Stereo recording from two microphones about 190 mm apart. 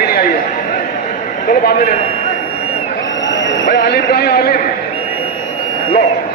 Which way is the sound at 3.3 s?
60° left (ahead or behind).